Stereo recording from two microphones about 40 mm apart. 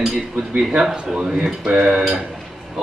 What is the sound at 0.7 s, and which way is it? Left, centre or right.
Speech, centre.